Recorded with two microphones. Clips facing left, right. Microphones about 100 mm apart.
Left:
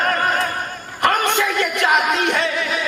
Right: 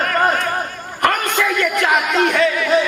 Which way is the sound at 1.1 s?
30° left (ahead or behind).